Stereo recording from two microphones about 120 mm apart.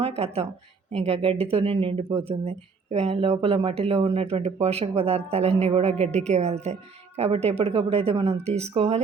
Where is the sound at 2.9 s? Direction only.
60° right (ahead or behind).